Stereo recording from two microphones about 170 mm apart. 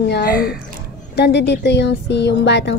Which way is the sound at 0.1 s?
70° left (ahead or behind).